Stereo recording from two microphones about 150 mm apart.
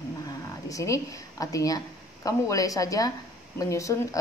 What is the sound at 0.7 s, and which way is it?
Speech, 20° left (ahead or behind).